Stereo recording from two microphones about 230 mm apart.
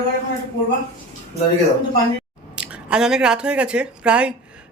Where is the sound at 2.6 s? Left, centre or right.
Centre.